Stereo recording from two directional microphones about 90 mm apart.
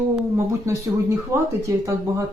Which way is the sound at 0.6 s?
30° right (ahead or behind).